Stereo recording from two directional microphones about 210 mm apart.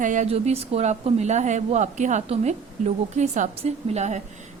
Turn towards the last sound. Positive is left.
turn(degrees=-35)  # may be behind; listen again after turning